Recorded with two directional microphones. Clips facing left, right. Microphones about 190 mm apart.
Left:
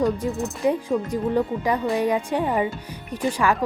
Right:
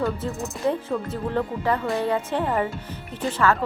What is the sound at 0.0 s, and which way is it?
Speech, 15° left (ahead or behind).